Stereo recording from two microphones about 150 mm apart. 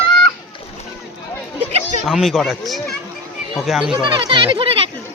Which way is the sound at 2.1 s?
Centre (ahead or behind).